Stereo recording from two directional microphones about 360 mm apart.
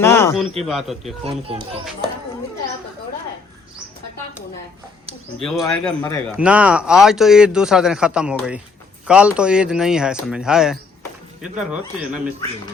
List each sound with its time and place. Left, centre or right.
0.0 s speech: centre
1.2 s speech: centre
5.4 s a man's voice: centre